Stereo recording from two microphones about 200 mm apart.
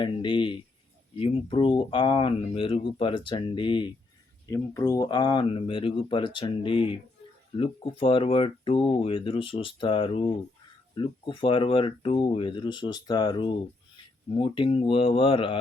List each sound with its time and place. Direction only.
0.0 s speech: 25° left (ahead or behind)